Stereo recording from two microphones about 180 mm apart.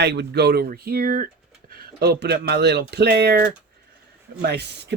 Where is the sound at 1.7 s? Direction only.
60° right (ahead or behind).